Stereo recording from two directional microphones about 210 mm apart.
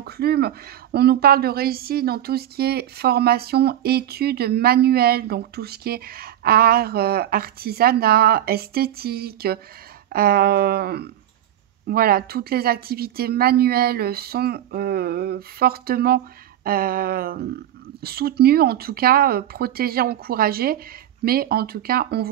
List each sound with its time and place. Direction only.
0.0 s speech: 50° right (ahead or behind)